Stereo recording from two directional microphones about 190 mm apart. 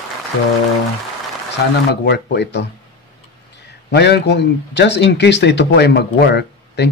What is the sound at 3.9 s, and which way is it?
A man's voice, 65° left (ahead or behind).